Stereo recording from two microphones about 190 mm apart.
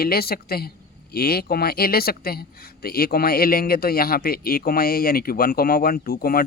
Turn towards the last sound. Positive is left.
turn(degrees=50)  # may be behind; listen again after turning